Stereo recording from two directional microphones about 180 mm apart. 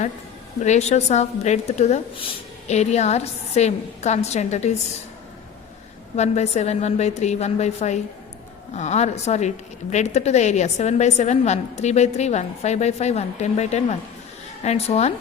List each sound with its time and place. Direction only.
0.6 s a woman's voice: 40° left (ahead or behind)
6.1 s a woman's voice: 40° left (ahead or behind)